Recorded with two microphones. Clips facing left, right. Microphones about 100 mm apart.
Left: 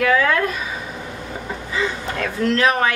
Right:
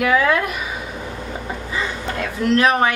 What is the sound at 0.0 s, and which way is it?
Speech, 15° right (ahead or behind).